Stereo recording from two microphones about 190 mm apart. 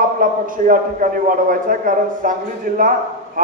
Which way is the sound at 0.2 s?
45° right (ahead or behind).